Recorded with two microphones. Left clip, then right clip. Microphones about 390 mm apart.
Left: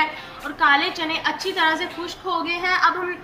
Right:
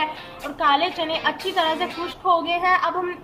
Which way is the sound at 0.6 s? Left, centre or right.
Right.